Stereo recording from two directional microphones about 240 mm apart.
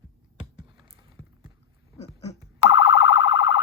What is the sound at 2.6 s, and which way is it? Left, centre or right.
Siren, left.